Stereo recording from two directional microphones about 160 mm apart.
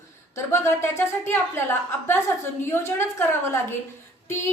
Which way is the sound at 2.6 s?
15° left (ahead or behind).